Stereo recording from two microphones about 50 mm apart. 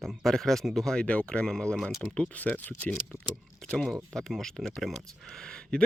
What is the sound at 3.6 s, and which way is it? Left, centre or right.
Speech, centre.